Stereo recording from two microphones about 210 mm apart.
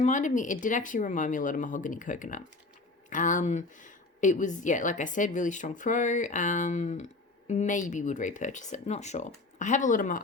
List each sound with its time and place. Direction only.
0.0 s speech: 35° left (ahead or behind)